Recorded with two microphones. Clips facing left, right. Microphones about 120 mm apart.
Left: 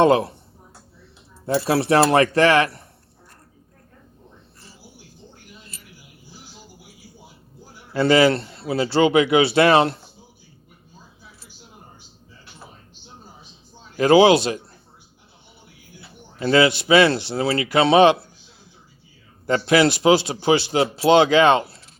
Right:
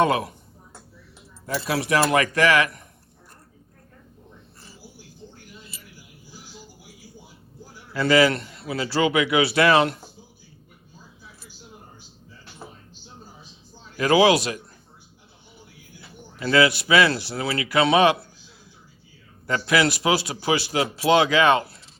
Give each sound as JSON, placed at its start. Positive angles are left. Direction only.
{"t": 0.0, "sound": "speech", "side_deg": 30}
{"t": 1.5, "sound": "speech", "side_deg": 35}
{"t": 7.9, "sound": "speech", "side_deg": 30}
{"t": 13.9, "sound": "speech", "side_deg": 30}
{"t": 16.4, "sound": "speech", "side_deg": 30}
{"t": 19.5, "sound": "speech", "side_deg": 30}